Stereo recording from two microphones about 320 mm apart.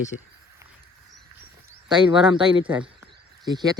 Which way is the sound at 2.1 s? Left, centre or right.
Centre.